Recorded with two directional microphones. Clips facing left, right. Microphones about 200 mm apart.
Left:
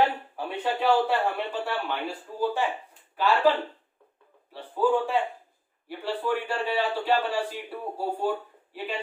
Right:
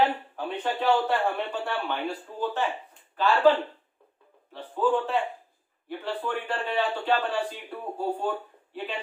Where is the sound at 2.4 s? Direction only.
10° left (ahead or behind).